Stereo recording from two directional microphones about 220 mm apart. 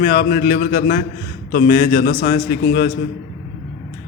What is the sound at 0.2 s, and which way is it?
A man's voice, 40° left (ahead or behind).